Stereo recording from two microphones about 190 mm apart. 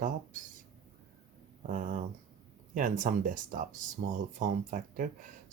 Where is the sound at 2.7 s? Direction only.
45° right (ahead or behind).